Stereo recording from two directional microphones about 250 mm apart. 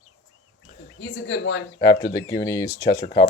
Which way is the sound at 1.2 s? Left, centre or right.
Left.